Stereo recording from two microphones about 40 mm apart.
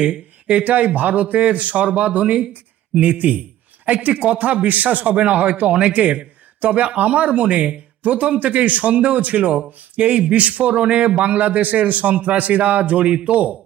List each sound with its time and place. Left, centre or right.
0.0 s speech: right
10.1 s speech: right